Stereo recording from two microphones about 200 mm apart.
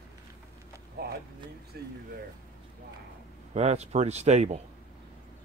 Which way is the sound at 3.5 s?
35° right (ahead or behind).